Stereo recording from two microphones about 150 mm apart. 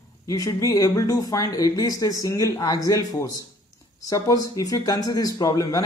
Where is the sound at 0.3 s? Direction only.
20° left (ahead or behind).